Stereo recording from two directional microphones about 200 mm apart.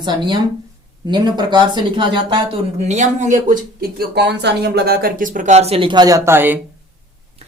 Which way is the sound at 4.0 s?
55° right (ahead or behind).